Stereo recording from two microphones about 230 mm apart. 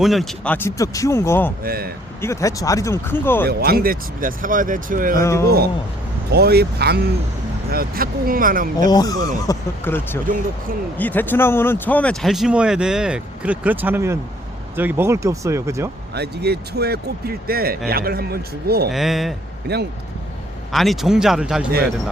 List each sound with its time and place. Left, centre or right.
0.0 s speech: centre
1.6 s speech: right
2.2 s speech: centre
3.4 s speech: right
5.2 s speech: centre
6.3 s speech: right
8.8 s speech: centre
16.1 s speech: right
18.9 s speech: centre
19.6 s speech: right
20.7 s speech: centre